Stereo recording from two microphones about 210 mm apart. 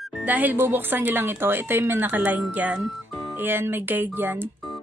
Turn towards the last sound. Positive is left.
turn(degrees=-10)  # may be behind; listen again after turning